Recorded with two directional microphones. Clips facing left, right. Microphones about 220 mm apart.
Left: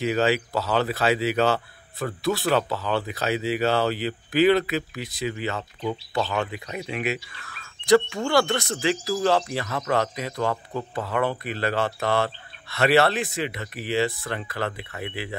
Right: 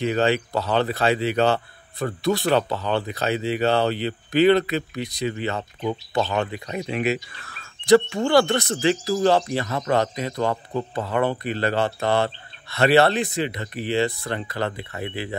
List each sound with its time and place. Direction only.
0.0 s speech: 5° left (ahead or behind)
6.9 s speech: 40° right (ahead or behind)
8.3 s speech: centre (ahead or behind)
10.3 s speech: 25° right (ahead or behind)
11.1 s speech: centre (ahead or behind)
14.9 s speech: 40° right (ahead or behind)